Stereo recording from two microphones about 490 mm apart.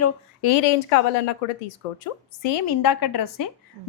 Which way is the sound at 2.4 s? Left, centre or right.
Left.